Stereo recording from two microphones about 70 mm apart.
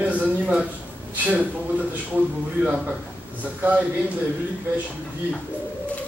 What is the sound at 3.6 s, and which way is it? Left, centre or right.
Speech, right.